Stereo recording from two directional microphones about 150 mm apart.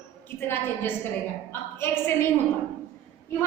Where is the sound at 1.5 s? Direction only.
15° left (ahead or behind).